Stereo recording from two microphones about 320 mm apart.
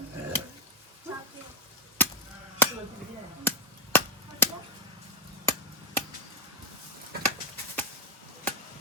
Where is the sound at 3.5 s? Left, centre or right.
Centre.